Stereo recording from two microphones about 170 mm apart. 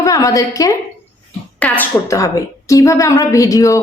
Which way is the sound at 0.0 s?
20° left (ahead or behind).